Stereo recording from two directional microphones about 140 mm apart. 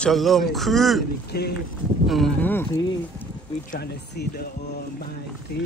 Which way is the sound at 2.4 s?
15° left (ahead or behind).